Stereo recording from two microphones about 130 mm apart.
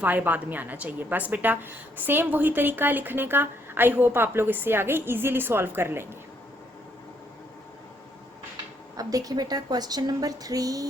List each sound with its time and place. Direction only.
0.0 s a woman's voice: 15° right (ahead or behind)
9.0 s a woman's voice: 30° right (ahead or behind)